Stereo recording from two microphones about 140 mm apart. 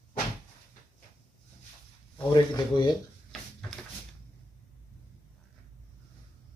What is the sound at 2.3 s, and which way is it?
Speech, 30° left (ahead or behind).